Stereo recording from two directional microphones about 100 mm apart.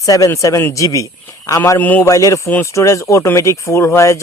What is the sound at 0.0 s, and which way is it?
Speech, 35° left (ahead or behind).